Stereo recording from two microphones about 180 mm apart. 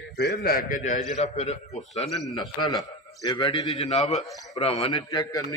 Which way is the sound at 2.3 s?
20° left (ahead or behind).